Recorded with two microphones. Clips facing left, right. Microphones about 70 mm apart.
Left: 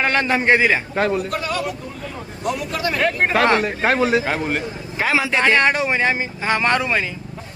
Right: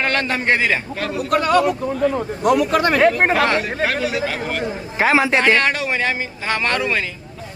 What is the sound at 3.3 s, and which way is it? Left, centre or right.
A man's voice, left.